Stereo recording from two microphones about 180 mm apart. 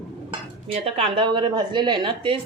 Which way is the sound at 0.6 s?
35° right (ahead or behind).